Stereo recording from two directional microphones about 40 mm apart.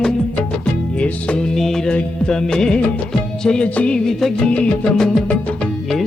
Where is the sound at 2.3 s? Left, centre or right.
Centre.